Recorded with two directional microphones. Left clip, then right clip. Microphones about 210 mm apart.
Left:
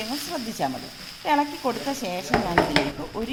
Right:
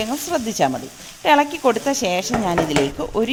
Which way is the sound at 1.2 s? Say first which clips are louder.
Right 8 dB; 45° right (ahead or behind).